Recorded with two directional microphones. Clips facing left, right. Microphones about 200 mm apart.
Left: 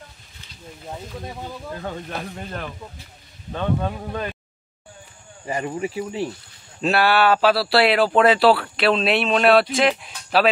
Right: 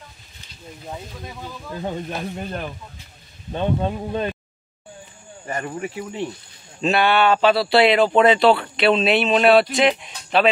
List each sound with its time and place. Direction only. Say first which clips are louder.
1.8 s speech: right 6 dB; 20° right (ahead or behind)
5.5 s speech: left 2 dB; 10° left (ahead or behind)